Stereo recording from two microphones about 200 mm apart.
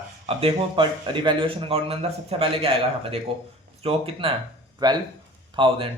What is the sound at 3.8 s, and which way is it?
A man's voice, 25° right (ahead or behind).